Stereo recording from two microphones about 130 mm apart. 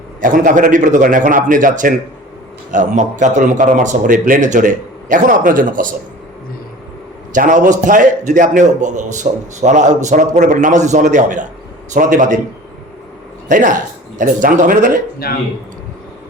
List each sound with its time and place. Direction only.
0.2 s a man's voice: 90° right
2.7 s speech: 70° right (ahead or behind); by 5.9 s 90° right
7.3 s a man's voice: 85° right
13.5 s speech: 90° right